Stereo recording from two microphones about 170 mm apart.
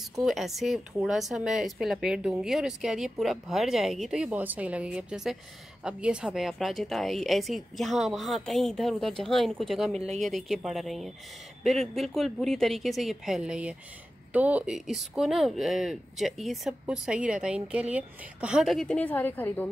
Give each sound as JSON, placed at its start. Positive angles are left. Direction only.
{"t": 0.2, "sound": "speech", "side_deg": 0}
{"t": 9.9, "sound": "speech", "side_deg": -40}
{"t": 10.2, "sound": "speech", "side_deg": 0}